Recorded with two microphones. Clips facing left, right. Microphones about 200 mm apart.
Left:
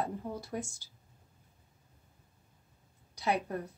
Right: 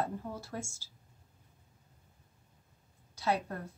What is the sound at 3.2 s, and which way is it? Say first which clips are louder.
Speech: even; 15° left (ahead or behind).